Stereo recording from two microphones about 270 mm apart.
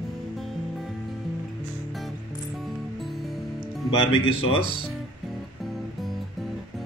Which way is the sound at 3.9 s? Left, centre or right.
Centre.